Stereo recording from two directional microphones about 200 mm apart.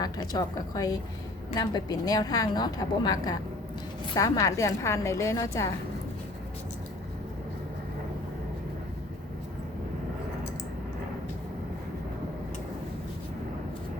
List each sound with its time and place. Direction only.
0.0 s a woman's voice: 20° left (ahead or behind)